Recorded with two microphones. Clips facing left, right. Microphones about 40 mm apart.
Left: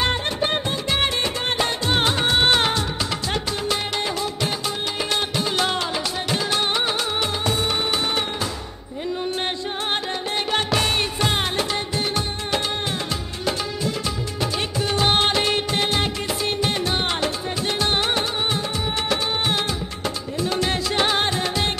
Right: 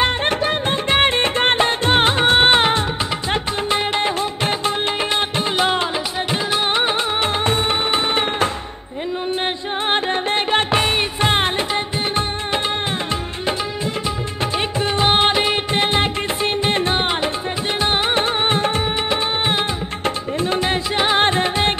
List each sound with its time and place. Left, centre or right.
0.2 s music: right
9.8 s music: right
14.4 s music of bollywood: right
17.7 s music: right
18.2 s music: right
19.0 s music of bollywood: right
20.3 s music: right